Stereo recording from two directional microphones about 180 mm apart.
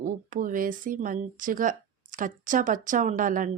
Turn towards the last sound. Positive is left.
turn(degrees=-45)  # may be behind; listen again after turning